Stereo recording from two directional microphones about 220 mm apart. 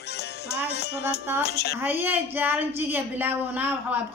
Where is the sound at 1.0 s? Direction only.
10° right (ahead or behind).